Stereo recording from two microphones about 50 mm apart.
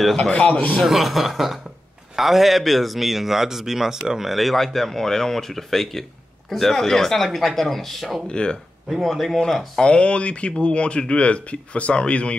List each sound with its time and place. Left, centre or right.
0.0 s speech: centre
0.3 s speech: left
0.8 s speech: centre
8.3 s speech: centre
9.0 s speech: centre
9.8 s speech: left